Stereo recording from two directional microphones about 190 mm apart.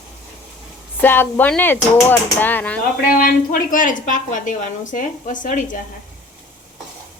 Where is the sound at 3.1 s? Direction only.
50° left (ahead or behind).